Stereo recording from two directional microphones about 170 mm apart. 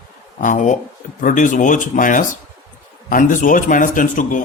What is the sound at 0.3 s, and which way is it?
Speech, 50° left (ahead or behind).